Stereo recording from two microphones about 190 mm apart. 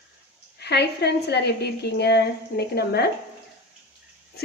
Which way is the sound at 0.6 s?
60° left (ahead or behind).